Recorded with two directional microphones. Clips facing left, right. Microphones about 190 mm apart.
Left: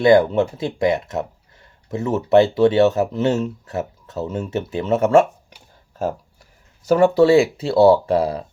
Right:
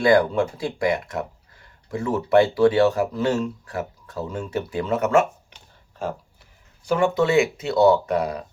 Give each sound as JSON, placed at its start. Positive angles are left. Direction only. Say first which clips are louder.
{"t": 0.0, "sound": "speech", "louder": "left 4 dB", "side_deg": 25}
{"t": 6.0, "sound": "speech", "louder": "left 5 dB", "side_deg": 40}